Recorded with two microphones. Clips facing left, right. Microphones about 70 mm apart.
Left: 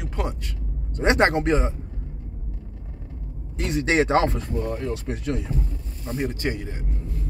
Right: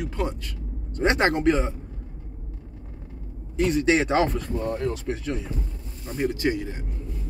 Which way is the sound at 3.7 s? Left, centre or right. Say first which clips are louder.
Left 2 dB; left.